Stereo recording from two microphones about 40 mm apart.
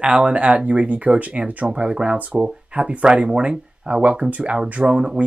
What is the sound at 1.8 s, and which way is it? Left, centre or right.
Speech, right.